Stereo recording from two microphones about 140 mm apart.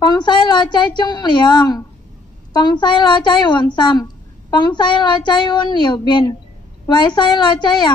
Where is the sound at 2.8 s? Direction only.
30° left (ahead or behind).